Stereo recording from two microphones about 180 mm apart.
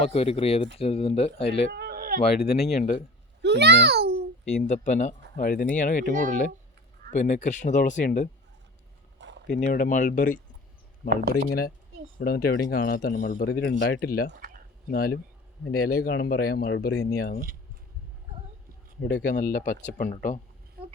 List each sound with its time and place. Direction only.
0.0 s speech: 35° left (ahead or behind)
1.7 s a sound: 60° right (ahead or behind)
2.4 s speech: 35° left (ahead or behind)
3.4 s a child's voice: 70° right (ahead or behind)
4.5 s speech: 40° left (ahead or behind)
9.1 s a sound: 85° right
9.5 s speech: 50° left (ahead or behind)
11.3 s a man's voice: 60° left (ahead or behind)
19.0 s speech: 50° left (ahead or behind)